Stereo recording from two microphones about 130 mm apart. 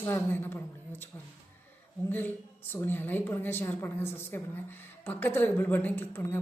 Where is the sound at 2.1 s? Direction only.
15° left (ahead or behind).